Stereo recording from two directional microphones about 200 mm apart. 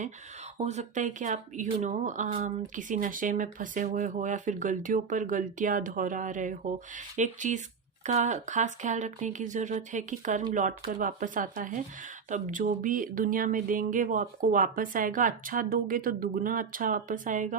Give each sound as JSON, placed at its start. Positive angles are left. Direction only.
{"t": 0.6, "sound": "speech", "side_deg": -35}